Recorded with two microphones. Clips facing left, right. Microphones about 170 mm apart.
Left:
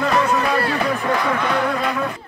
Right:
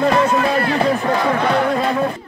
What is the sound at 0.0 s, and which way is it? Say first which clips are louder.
Music: right 3 dB; 30° right (ahead or behind).